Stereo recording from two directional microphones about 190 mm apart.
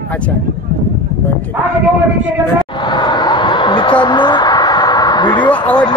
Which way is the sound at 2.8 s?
25° left (ahead or behind).